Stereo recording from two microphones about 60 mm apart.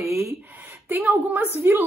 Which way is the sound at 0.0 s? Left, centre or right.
Right.